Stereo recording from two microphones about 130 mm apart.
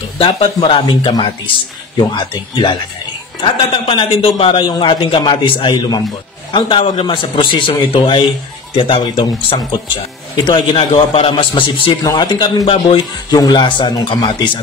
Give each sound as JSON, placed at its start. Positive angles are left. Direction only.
{"t": 0.2, "sound": "a man's voice", "side_deg": 40}
{"t": 6.5, "sound": "a man's voice", "side_deg": 45}
{"t": 13.3, "sound": "a man's voice", "side_deg": 30}